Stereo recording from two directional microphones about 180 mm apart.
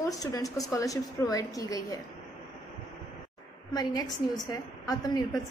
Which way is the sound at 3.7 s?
20° left (ahead or behind).